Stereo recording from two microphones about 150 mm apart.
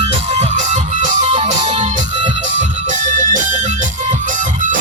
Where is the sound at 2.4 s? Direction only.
55° right (ahead or behind).